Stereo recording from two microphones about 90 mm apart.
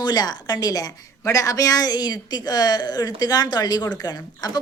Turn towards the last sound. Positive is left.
turn(degrees=50)  # may be behind; listen again after turning